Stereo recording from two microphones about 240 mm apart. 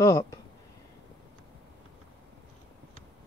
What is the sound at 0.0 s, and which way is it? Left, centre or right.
Speech, centre.